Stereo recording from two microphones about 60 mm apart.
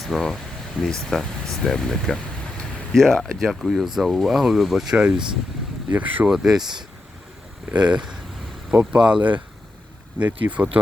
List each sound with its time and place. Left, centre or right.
0.0 s speech: centre
4.9 s speech: centre
6.3 s speech: centre
7.7 s speech: centre
10.2 s speech: right